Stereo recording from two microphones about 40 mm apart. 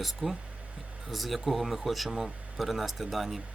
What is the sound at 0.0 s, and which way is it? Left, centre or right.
Speech, centre.